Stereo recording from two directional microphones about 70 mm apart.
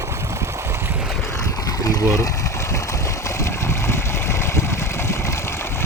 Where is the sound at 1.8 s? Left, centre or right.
Left.